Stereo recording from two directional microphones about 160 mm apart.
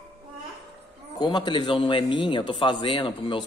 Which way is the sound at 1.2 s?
25° left (ahead or behind).